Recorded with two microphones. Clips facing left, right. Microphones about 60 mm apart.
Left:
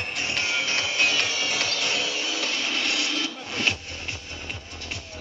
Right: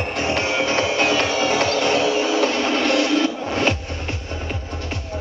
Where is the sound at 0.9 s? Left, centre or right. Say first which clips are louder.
Right 6 dB; centre.